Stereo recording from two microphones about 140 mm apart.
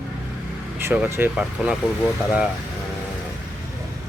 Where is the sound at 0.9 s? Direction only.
15° right (ahead or behind).